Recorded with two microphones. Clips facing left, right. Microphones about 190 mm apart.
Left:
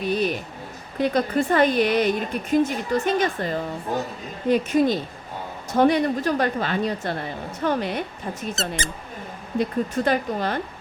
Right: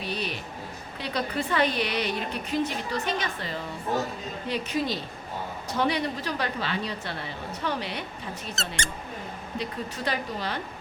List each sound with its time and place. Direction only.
0.0 s a sound: 50° left (ahead or behind)
0.9 s a woman's voice: 50° left (ahead or behind)
8.5 s speech: centre (ahead or behind)
9.6 s a woman's voice: 50° left (ahead or behind)